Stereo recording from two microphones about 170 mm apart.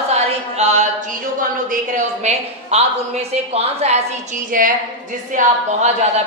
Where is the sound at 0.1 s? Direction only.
40° right (ahead or behind).